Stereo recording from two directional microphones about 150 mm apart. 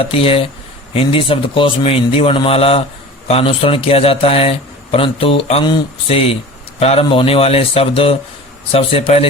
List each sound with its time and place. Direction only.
0.0 s speech: 40° left (ahead or behind)